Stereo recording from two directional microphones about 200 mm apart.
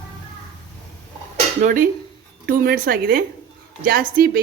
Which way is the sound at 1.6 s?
45° right (ahead or behind).